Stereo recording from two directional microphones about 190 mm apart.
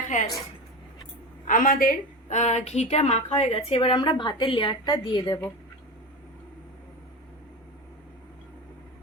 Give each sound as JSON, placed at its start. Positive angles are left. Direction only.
{"t": 0.1, "sound": "a woman's voice", "side_deg": 40}
{"t": 1.5, "sound": "a woman's voice", "side_deg": 45}